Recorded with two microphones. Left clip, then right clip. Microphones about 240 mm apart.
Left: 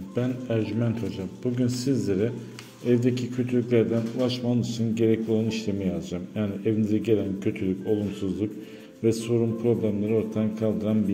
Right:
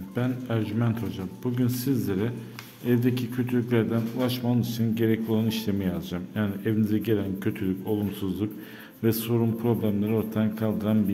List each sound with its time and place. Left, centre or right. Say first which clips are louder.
0.1 s a man's voice: left 2 dB; centre
9.0 s a man's voice: left 2 dB; centre